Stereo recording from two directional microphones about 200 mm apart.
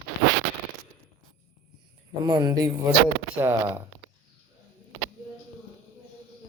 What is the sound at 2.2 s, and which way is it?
Speech, 20° right (ahead or behind).